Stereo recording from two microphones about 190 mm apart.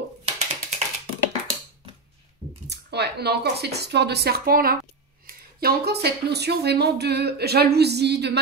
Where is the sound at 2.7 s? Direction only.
60° right (ahead or behind).